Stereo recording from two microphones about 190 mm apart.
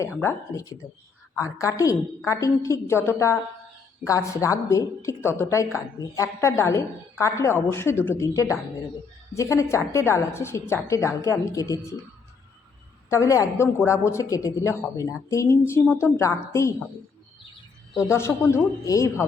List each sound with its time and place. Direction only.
0.2 s a woman's voice: 15° left (ahead or behind)
13.1 s a woman's voice: 15° left (ahead or behind)
18.0 s a woman's voice: 15° left (ahead or behind)